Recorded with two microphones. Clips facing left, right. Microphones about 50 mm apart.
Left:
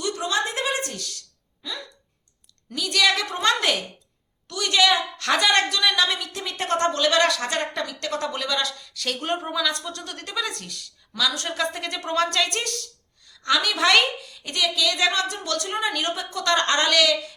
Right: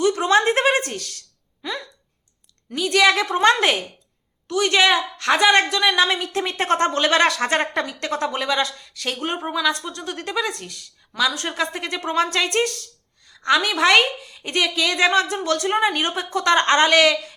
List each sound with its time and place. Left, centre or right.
0.0 s a sound: right
2.6 s a woman's voice: right
5.2 s a woman's voice: centre; by 7.9 s right
8.0 s a woman's voice: right